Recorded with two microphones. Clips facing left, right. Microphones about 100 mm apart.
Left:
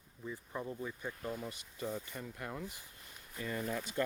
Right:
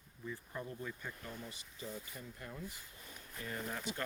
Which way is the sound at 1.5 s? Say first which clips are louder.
Left 6 dB; 65° left (ahead or behind).